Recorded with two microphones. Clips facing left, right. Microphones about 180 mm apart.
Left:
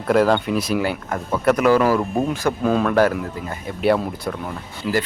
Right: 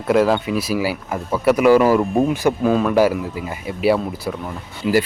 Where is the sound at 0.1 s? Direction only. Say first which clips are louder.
Right 1 dB; 5° right (ahead or behind).